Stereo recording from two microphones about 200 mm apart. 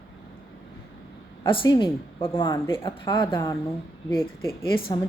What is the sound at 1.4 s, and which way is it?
A woman's voice, 20° left (ahead or behind).